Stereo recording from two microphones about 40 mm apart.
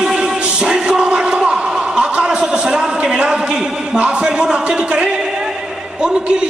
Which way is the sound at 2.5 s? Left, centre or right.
Right.